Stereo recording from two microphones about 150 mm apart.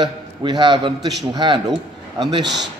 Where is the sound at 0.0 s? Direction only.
30° right (ahead or behind).